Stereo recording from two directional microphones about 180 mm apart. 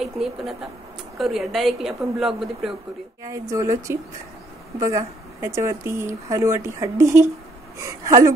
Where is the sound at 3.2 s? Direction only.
15° right (ahead or behind).